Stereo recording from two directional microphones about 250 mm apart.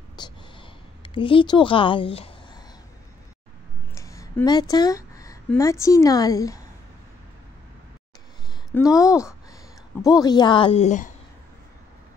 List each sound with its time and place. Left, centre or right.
0.1 s a sound: centre
3.9 s speech: centre
8.7 s a woman's voice: centre